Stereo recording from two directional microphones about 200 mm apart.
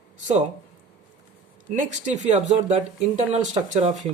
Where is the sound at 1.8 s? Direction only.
35° right (ahead or behind).